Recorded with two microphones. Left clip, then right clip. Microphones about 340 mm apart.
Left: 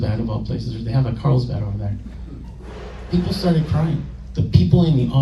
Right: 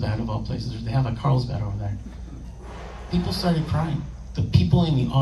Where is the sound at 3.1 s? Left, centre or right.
Right.